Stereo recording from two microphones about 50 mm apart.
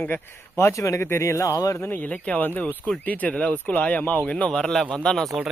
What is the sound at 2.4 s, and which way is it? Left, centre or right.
Speech, left.